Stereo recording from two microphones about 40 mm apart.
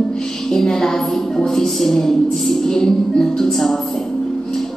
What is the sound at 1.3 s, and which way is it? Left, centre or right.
A woman's voice, centre.